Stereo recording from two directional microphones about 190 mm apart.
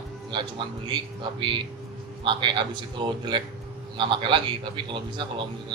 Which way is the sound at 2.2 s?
25° right (ahead or behind).